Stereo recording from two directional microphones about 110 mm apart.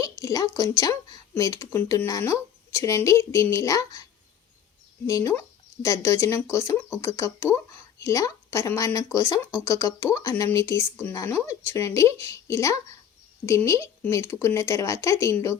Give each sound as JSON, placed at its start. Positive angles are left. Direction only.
{"t": 0.0, "sound": "a woman's voice", "side_deg": 30}
{"t": 5.0, "sound": "speech", "side_deg": 30}